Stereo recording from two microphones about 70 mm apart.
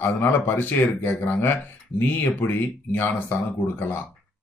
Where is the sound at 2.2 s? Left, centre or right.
Left.